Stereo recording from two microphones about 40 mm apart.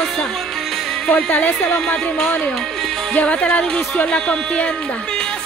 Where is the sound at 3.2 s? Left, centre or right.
Left.